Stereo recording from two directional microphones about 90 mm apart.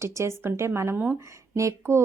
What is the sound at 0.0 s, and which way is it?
Speech, 30° right (ahead or behind).